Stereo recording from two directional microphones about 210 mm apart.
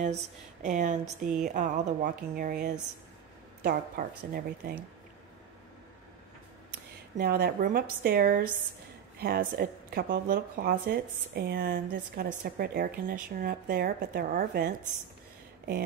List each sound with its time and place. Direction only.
0.0 s speech: 35° right (ahead or behind)
7.2 s speech: 45° right (ahead or behind)